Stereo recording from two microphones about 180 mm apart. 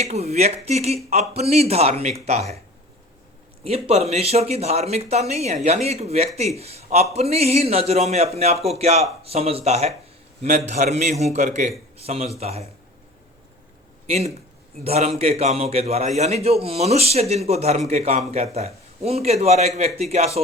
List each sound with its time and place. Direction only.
0.0 s a man's voice: 35° right (ahead or behind)
3.6 s a man's voice: 35° right (ahead or behind)
14.1 s a man's voice: 40° right (ahead or behind)